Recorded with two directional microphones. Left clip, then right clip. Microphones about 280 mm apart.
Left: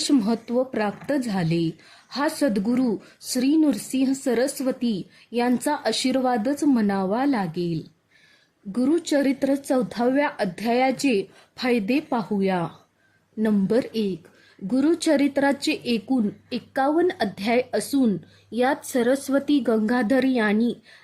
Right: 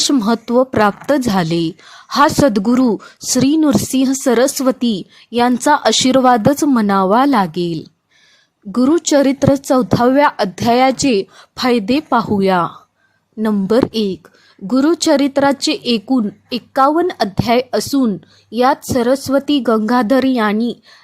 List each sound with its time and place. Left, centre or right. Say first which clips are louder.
0.0 s a woman's voice: right 8 dB; right